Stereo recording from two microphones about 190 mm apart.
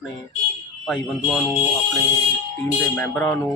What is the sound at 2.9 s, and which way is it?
Speech, 5° left (ahead or behind).